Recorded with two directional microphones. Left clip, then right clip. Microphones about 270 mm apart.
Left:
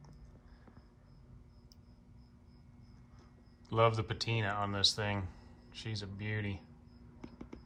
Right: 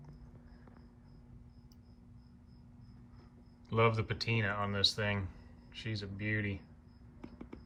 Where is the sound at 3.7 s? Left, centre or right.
Centre.